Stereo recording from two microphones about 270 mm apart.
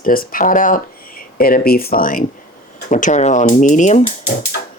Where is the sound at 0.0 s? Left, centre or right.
Left.